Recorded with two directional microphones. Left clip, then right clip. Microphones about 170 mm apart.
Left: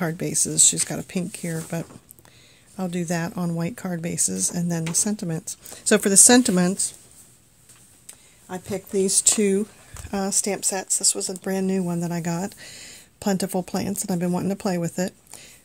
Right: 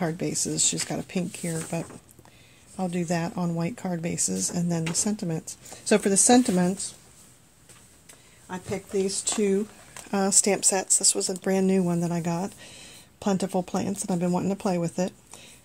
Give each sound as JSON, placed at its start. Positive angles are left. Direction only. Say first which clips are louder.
{"t": 0.0, "sound": "speech", "louder": "left 2 dB", "side_deg": 25}
{"t": 8.5, "sound": "speech", "louder": "left 2 dB", "side_deg": 80}
{"t": 10.0, "sound": "speech", "louder": "right 1 dB", "side_deg": 10}
{"t": 10.3, "sound": "speech", "louder": "right 3 dB", "side_deg": 0}